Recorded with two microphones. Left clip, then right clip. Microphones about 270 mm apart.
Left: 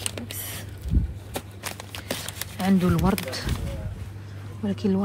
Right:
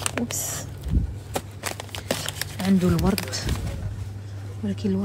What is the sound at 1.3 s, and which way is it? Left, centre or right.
Shuffling cards, right.